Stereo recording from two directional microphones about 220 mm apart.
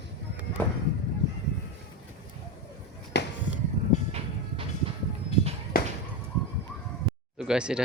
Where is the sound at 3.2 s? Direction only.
50° left (ahead or behind).